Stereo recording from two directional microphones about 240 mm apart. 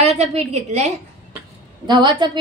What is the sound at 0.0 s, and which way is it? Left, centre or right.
A woman's voice, right.